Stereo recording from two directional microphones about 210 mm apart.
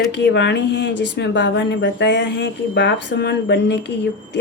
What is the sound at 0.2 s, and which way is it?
Speech, 55° left (ahead or behind).